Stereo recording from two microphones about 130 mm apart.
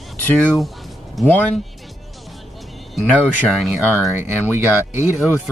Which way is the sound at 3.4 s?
Centre (ahead or behind).